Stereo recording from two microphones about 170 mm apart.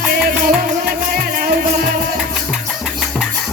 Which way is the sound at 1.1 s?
60° right (ahead or behind).